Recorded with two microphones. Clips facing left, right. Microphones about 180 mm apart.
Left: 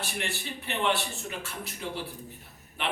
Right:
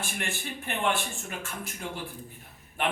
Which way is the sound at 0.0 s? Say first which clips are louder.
Even; 50° right (ahead or behind).